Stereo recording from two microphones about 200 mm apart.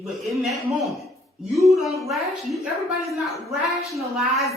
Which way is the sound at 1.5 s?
Centre (ahead or behind).